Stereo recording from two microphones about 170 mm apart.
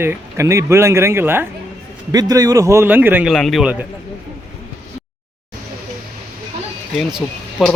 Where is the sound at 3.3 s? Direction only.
Centre (ahead or behind).